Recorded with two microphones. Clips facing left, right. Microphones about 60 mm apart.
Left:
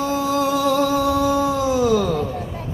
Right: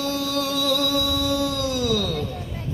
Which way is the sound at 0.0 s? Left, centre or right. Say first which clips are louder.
Left 5 dB; centre.